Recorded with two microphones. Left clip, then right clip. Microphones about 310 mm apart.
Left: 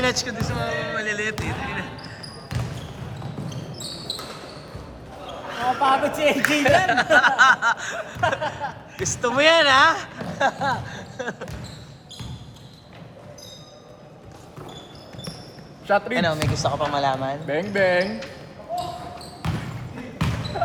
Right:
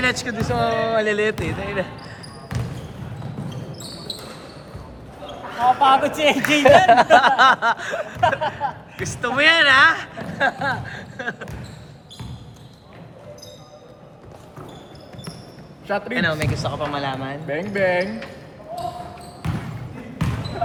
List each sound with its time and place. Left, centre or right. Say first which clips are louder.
0.0 s speech: right 2 dB; centre
5.8 s speech: right 1 dB; centre
8.4 s speech: right 4 dB; right
9.2 s speech: right 1 dB; centre
10.2 s a sound: right 1 dB; centre
15.9 s speech: left 4 dB; left
16.1 s speech: right 1 dB; centre
17.4 s speech: right 1 dB; left
19.4 s basketball bounce: even; centre